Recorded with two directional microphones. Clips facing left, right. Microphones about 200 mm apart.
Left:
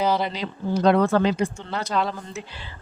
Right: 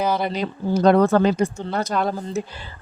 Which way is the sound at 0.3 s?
45° right (ahead or behind).